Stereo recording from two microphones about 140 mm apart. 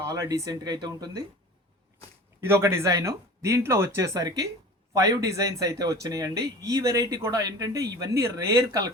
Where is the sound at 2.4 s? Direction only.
20° right (ahead or behind).